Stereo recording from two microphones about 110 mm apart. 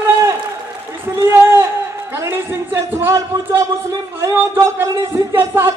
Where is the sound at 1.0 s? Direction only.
25° right (ahead or behind).